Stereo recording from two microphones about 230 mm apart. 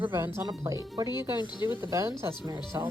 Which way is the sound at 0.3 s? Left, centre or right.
Centre.